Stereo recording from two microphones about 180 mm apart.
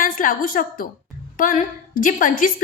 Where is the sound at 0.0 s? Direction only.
50° left (ahead or behind).